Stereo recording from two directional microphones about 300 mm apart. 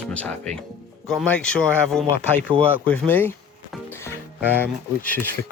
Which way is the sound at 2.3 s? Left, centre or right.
Centre.